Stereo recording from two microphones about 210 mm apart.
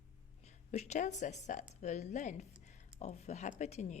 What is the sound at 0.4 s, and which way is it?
A woman's voice, 30° left (ahead or behind).